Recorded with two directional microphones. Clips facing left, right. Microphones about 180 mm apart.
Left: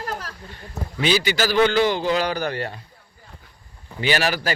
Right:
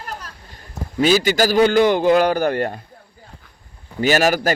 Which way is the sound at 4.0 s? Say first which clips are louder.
Right 6 dB; 45° right (ahead or behind).